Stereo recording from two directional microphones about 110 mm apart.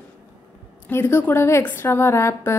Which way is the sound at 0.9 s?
20° left (ahead or behind).